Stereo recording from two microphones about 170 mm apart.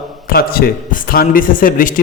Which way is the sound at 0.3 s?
60° left (ahead or behind).